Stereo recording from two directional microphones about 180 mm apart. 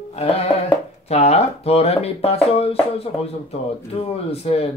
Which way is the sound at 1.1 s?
35° left (ahead or behind).